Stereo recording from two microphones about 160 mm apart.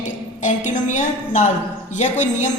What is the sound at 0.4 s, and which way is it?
A woman's voice, 50° left (ahead or behind).